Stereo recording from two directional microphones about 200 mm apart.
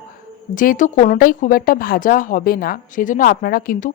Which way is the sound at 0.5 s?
45° left (ahead or behind).